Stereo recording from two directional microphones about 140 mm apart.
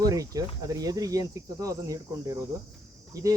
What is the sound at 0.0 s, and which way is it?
Speech, 25° right (ahead or behind).